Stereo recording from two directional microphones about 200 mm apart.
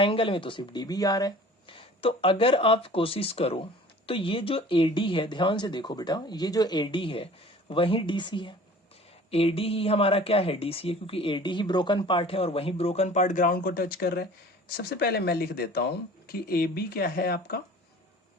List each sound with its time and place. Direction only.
0.0 s speech: 25° left (ahead or behind); by 17.6 s 50° left (ahead or behind)